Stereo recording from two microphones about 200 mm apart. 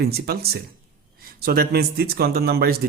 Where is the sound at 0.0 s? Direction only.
50° right (ahead or behind).